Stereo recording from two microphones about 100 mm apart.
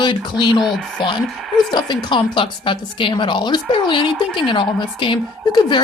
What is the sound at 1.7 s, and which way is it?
A woman's voice, 50° left (ahead or behind).